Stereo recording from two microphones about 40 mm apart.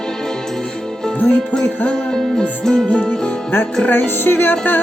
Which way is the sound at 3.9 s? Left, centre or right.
Left.